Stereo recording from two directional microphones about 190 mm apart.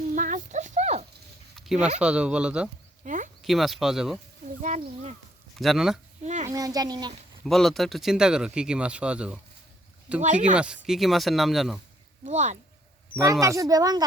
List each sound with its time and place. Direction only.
0.1 s horse: 40° right (ahead or behind)
1.5 s a sound: centre (ahead or behind)
2.0 s speech: 5° right (ahead or behind)
3.0 s a sound: 40° right (ahead or behind)
3.4 s speech: centre (ahead or behind)
4.6 s a sound: 40° right (ahead or behind)
5.5 s speech: centre (ahead or behind)
6.2 s a sound: 35° right (ahead or behind)
6.5 s speech: 20° right (ahead or behind)
7.4 s speech: centre (ahead or behind)
10.2 s speech: 40° right (ahead or behind)
10.5 s speech: 5° right (ahead or behind)
12.2 s speech: 40° right (ahead or behind)
13.4 s speech: 15° right (ahead or behind)